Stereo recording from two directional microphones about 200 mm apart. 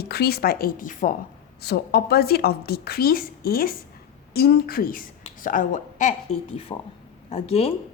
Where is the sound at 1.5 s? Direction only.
50° left (ahead or behind); by 7.7 s 30° left (ahead or behind).